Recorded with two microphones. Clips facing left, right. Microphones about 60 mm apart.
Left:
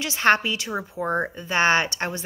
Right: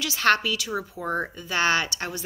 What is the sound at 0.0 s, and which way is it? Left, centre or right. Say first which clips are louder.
A woman's voice: left 2 dB; left.